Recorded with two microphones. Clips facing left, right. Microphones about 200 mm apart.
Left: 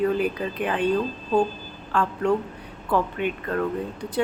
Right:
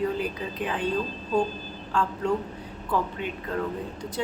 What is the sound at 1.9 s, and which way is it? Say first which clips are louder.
Speech: left 2 dB; 60° left (ahead or behind).